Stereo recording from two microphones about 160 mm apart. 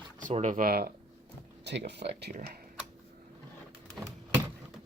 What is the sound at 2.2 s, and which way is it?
Speech, 80° right.